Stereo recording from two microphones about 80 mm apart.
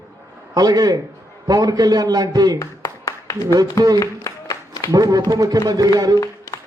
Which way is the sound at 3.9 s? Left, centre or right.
Left.